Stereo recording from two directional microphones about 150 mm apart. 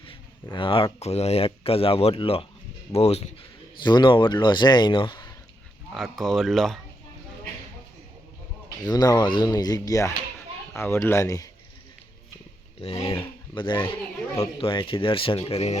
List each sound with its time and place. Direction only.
0.5 s speech: 35° left (ahead or behind)
3.8 s speech: 30° left (ahead or behind)
5.9 s speech: centre (ahead or behind)
8.9 s a child's voice: 25° left (ahead or behind)
12.8 s speech: 40° left (ahead or behind)